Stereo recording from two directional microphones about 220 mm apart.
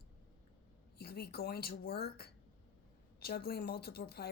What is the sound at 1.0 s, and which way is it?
A woman's voice, 45° left (ahead or behind).